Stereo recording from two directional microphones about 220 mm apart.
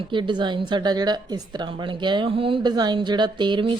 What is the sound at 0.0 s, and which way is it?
A woman's voice, 20° right (ahead or behind).